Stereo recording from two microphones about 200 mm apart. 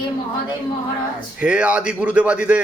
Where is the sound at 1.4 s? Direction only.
5° right (ahead or behind).